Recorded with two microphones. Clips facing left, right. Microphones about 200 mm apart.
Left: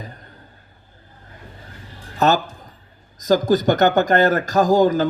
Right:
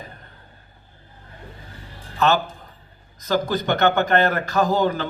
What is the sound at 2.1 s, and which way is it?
A man's voice, 40° left (ahead or behind).